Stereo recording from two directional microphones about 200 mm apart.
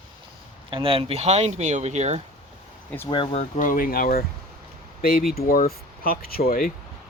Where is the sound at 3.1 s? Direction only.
25° left (ahead or behind).